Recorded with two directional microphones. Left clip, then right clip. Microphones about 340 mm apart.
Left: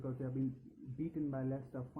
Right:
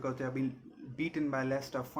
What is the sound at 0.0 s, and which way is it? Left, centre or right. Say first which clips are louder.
Speech: right 7 dB; centre.